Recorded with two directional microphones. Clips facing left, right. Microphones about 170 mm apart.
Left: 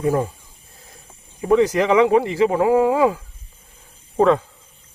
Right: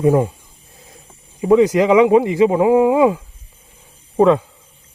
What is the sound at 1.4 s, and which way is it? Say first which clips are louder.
Speech: right 4 dB; 15° right (ahead or behind).